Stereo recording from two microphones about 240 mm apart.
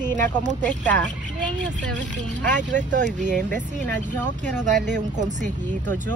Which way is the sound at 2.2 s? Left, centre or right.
Right.